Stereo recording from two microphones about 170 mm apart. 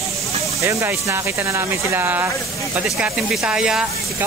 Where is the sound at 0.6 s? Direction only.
15° right (ahead or behind).